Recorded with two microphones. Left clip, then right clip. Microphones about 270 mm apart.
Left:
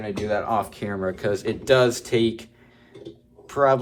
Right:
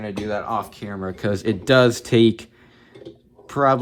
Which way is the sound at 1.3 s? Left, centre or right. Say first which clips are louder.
Right 2 dB; right.